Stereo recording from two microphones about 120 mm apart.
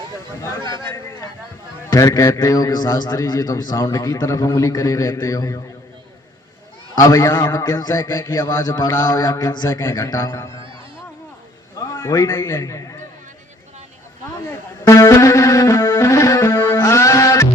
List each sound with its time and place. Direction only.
1.9 s a man's voice: 25° left (ahead or behind)
6.9 s a man's voice: 25° left (ahead or behind)
7.4 s a man's voice: 35° left (ahead or behind)
11.8 s a man's voice: 30° left (ahead or behind)
14.8 s music: 25° left (ahead or behind)
16.7 s a sound: 25° left (ahead or behind)